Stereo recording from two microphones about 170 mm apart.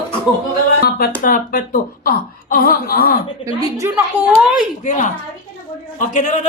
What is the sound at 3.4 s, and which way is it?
Speech, 20° right (ahead or behind).